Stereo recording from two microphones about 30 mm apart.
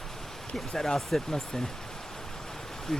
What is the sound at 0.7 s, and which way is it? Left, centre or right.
Speech, centre.